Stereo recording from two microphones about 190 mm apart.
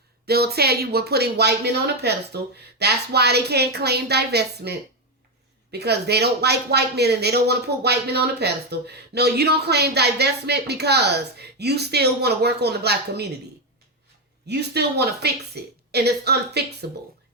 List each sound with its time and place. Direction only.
0.3 s speech: 55° right (ahead or behind)
14.4 s speech: 60° right (ahead or behind)